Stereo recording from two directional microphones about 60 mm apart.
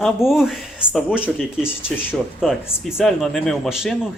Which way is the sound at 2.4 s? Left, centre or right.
Centre.